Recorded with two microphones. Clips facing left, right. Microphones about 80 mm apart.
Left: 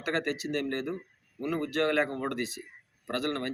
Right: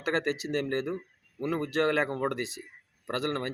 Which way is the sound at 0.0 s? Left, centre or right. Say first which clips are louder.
Right 2 dB; right.